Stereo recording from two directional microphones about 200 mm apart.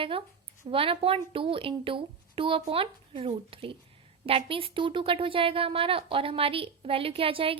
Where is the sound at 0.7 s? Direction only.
25° right (ahead or behind).